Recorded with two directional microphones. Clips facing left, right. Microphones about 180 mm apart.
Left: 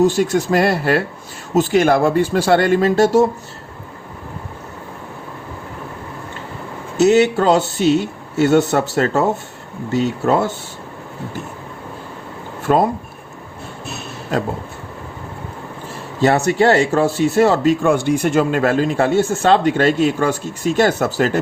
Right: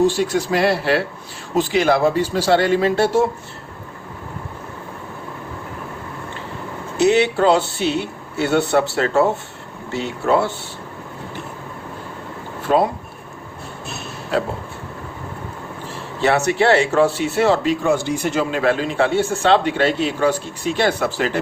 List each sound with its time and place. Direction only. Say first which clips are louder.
0.0 s speech: left 2 dB; 45° left (ahead or behind)
6.9 s speech: left 3 dB; 45° left (ahead or behind)
16.5 s speech: left 2 dB; 40° left (ahead or behind)